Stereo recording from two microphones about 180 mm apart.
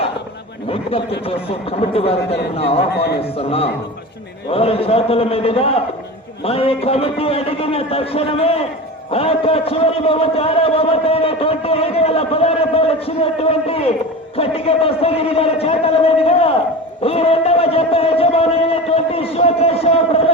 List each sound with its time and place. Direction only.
0.7 s a man's voice: 30° left (ahead or behind)
2.9 s a man's voice: 65° left (ahead or behind)
3.3 s a man's voice: 30° left (ahead or behind)